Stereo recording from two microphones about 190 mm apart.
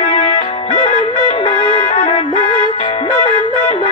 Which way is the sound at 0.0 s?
35° left (ahead or behind).